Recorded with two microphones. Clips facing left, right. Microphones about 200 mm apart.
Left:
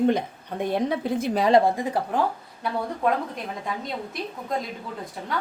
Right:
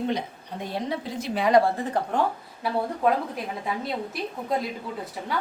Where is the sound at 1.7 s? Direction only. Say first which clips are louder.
Left 2 dB; 10° left (ahead or behind).